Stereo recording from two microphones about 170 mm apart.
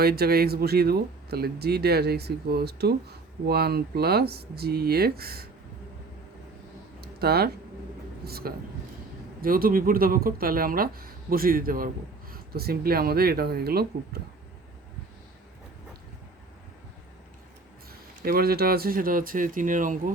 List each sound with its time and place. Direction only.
0.0 s speech: 65° right (ahead or behind)
7.0 s a sound: 65° right (ahead or behind)
8.2 s speech: 65° right (ahead or behind)
18.2 s speech: 60° right (ahead or behind)